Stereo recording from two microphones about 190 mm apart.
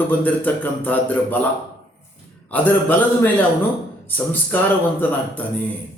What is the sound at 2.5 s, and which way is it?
A man's voice, 10° left (ahead or behind).